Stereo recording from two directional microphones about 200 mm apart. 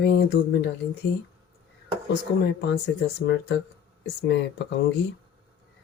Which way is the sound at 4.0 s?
60° left (ahead or behind).